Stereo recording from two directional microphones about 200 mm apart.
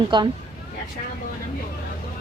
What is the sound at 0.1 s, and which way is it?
Speech, 25° right (ahead or behind).